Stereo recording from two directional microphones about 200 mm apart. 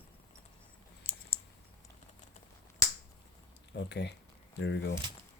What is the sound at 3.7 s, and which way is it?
Speech, 60° left (ahead or behind).